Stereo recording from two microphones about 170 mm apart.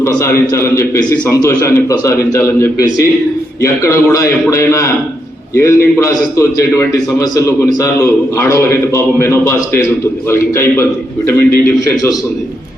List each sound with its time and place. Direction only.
0.0 s a man's voice: 15° left (ahead or behind)